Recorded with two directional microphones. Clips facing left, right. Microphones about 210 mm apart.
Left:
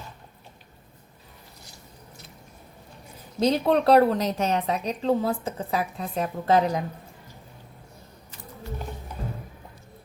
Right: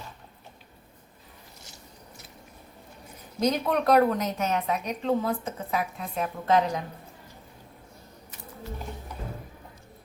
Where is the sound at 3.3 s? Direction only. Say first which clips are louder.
Left 4 dB; 30° left (ahead or behind).